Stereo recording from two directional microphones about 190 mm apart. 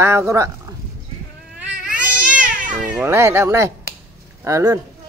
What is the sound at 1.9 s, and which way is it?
Baby cry, 5° right (ahead or behind).